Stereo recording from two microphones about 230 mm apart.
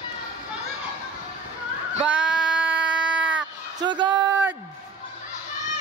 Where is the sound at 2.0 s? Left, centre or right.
Centre.